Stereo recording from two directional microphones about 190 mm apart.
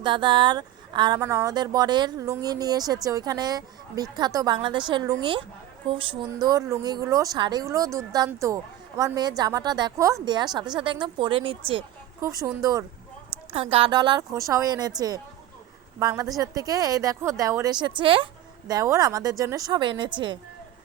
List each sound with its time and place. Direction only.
0.0 s speech: 25° right (ahead or behind)
12.2 s speech: 15° right (ahead or behind)
13.5 s a woman's voice: 30° right (ahead or behind)